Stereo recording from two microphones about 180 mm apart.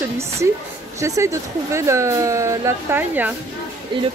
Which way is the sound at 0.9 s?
15° right (ahead or behind).